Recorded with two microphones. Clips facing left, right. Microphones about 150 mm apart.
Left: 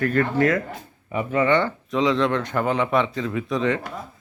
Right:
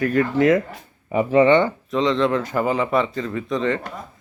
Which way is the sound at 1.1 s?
35° right (ahead or behind).